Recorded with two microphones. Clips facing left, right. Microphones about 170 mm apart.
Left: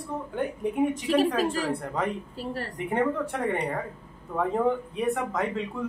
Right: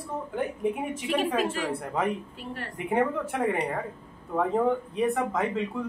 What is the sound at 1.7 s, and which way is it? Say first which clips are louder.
Speech: even; 5° right (ahead or behind).